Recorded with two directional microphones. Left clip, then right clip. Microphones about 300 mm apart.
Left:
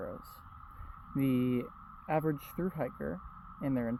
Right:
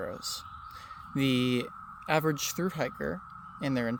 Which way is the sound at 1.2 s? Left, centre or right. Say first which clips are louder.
Right 4 dB; centre.